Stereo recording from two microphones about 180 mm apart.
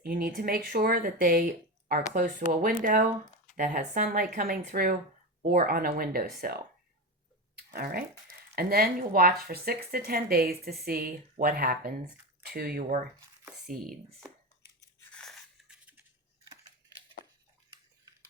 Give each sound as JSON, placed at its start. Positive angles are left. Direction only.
{"t": 0.0, "sound": "speech", "side_deg": -55}
{"t": 15.1, "sound": "crunch", "side_deg": 0}